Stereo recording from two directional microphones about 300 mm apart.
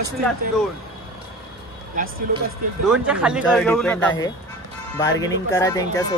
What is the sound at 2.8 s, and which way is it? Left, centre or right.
Speech, centre.